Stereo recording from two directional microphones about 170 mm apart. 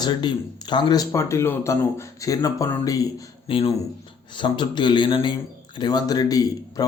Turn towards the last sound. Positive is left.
turn(degrees=20)  # may be behind; listen again after turning